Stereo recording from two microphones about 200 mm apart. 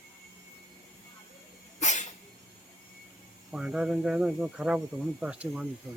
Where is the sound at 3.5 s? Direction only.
5° right (ahead or behind).